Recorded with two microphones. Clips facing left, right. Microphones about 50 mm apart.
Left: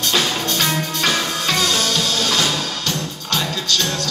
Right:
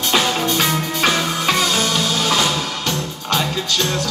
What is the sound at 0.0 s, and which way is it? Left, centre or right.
Music, centre.